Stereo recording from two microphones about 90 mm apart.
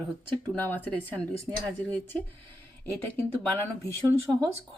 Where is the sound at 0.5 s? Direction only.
20° left (ahead or behind).